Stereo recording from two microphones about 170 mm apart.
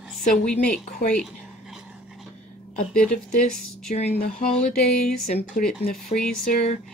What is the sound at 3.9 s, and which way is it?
Speech, 50° left (ahead or behind).